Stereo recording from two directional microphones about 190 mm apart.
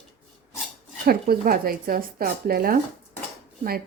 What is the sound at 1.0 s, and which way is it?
Speech, 50° right (ahead or behind).